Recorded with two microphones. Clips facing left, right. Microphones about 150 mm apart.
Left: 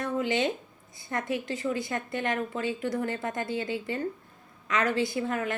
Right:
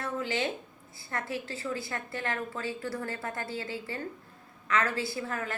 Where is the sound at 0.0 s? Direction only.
20° left (ahead or behind).